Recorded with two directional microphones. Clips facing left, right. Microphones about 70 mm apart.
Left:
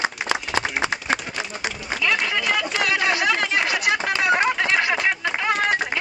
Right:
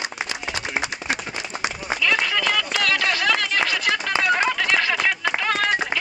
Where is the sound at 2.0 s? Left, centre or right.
Centre.